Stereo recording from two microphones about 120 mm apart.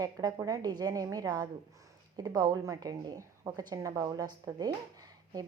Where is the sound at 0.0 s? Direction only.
30° right (ahead or behind).